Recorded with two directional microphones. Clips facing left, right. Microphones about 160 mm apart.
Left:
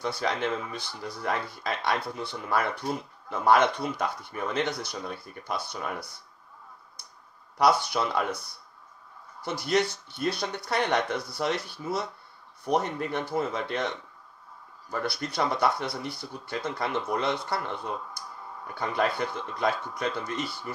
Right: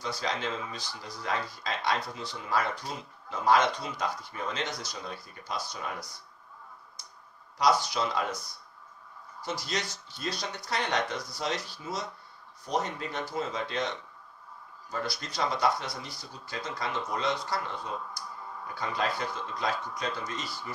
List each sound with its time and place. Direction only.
0.0 s speech: 55° left (ahead or behind)
7.5 s speech: 60° left (ahead or behind)
9.4 s speech: 60° left (ahead or behind)
14.9 s speech: 60° left (ahead or behind)